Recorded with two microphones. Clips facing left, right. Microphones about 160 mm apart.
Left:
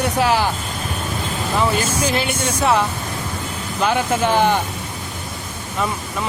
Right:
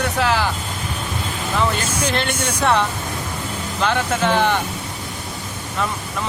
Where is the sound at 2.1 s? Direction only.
5° left (ahead or behind).